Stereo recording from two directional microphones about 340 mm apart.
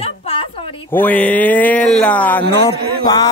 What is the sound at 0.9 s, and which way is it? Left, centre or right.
Speech, centre.